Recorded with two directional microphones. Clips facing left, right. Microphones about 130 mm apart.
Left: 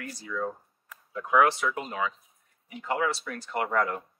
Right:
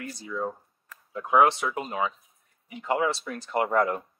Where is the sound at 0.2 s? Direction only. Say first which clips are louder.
Even; 25° right (ahead or behind).